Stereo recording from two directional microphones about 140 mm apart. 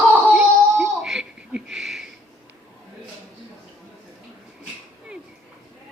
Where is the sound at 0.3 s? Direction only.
5° right (ahead or behind).